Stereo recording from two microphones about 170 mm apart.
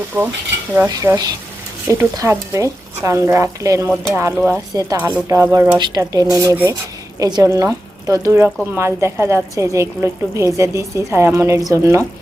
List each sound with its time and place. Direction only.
0.1 s a woman's voice: 20° right (ahead or behind)